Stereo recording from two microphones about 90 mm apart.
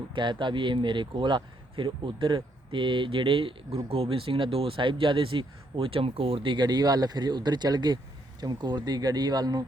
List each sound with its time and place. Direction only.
0.1 s speech: 60° right (ahead or behind); by 3.8 s 80° right
3.8 s speech: 90° right; by 9.6 s 45° right (ahead or behind)